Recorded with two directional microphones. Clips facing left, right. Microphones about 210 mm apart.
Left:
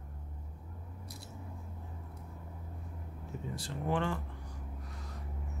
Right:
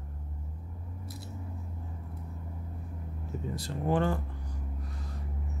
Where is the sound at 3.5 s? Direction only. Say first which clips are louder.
Right 5 dB; 40° right (ahead or behind).